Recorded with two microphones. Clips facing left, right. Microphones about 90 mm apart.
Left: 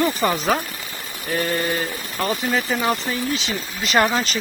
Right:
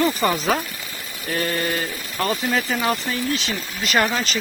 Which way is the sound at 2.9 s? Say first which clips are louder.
Even; 20° left (ahead or behind).